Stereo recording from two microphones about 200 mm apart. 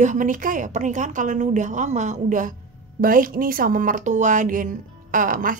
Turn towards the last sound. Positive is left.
turn(degrees=-45)  # may be behind; listen again after turning